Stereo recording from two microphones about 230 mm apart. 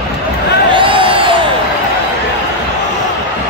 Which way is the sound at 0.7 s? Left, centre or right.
Right.